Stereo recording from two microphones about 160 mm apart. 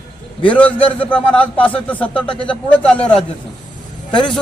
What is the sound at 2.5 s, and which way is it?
Speech, 5° left (ahead or behind).